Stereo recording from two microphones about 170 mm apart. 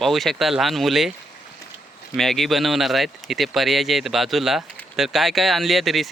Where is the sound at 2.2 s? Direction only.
Centre (ahead or behind).